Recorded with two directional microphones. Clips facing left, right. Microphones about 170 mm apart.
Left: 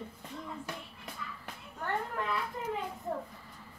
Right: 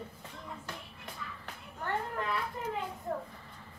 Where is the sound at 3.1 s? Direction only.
10° left (ahead or behind).